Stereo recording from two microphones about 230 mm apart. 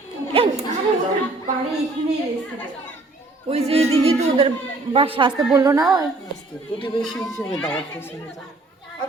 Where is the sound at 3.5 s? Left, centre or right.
Right.